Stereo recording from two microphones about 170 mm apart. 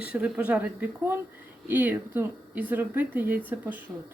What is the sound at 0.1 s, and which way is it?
Speech, 5° right (ahead or behind).